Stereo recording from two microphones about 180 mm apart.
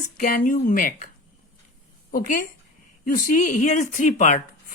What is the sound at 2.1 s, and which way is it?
Speech, 50° left (ahead or behind).